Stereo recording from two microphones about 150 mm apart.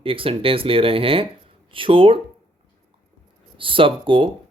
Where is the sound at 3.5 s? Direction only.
35° right (ahead or behind).